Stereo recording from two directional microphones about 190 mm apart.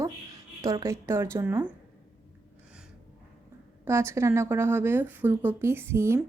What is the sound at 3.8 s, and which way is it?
Speech, 15° right (ahead or behind).